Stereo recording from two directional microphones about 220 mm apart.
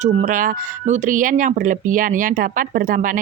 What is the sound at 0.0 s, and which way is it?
A woman's voice, 35° right (ahead or behind).